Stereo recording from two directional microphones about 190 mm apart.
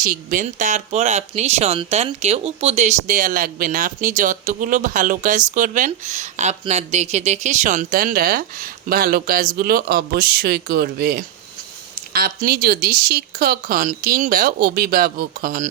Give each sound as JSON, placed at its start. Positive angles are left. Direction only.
{"t": 0.0, "sound": "speech", "side_deg": -45}